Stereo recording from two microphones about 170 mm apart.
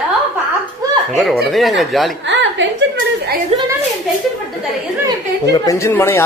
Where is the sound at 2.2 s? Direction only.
90° right.